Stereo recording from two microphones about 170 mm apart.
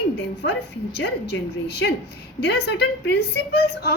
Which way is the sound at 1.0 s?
80° left.